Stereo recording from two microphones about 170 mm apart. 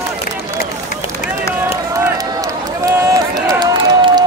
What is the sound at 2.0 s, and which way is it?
Run, 20° right (ahead or behind).